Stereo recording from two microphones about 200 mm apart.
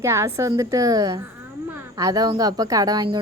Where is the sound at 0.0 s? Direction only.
15° right (ahead or behind).